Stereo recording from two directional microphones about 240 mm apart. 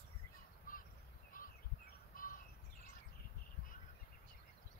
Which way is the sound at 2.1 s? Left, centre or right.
Left.